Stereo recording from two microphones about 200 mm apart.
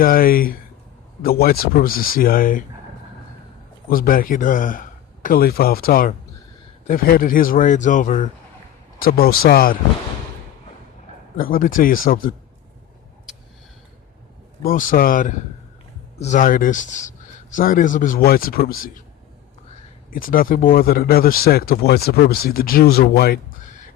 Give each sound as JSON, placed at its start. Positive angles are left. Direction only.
{"t": 0.0, "sound": "speech", "side_deg": 45}
{"t": 3.8, "sound": "speech", "side_deg": 45}
{"t": 11.3, "sound": "speech", "side_deg": 45}
{"t": 14.6, "sound": "speech", "side_deg": 45}
{"t": 20.1, "sound": "speech", "side_deg": 45}